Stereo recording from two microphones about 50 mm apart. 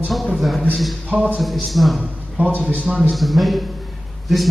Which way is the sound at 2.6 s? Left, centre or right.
Left.